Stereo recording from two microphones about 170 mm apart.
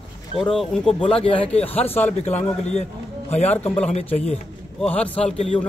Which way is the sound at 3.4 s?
10° left (ahead or behind).